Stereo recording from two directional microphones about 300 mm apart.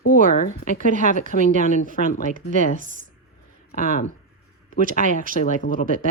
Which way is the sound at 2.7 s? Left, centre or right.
Right.